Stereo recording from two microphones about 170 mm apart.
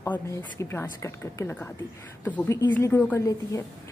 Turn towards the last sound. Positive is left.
turn(degrees=15)  # may be behind; listen again after turning